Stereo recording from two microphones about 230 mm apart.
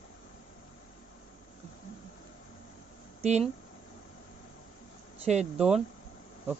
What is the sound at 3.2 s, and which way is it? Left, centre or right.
Speech, right.